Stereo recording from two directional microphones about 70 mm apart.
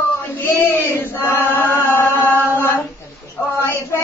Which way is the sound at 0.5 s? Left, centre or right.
Left.